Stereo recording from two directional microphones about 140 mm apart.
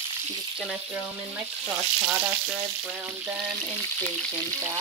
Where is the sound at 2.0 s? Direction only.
15° right (ahead or behind).